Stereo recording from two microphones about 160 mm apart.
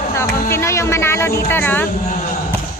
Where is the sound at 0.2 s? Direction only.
15° left (ahead or behind).